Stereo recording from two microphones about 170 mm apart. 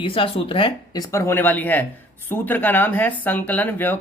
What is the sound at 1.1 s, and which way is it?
Speech, 15° left (ahead or behind).